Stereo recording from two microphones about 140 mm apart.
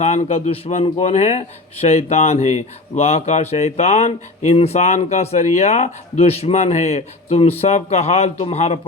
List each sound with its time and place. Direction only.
0.0 s speech: 55° left (ahead or behind)